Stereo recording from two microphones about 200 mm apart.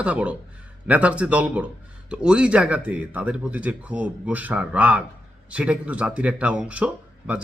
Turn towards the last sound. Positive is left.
turn(degrees=-5)  # may be behind; listen again after turning